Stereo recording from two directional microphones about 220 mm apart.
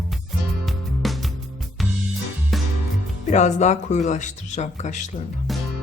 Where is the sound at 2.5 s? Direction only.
Centre (ahead or behind).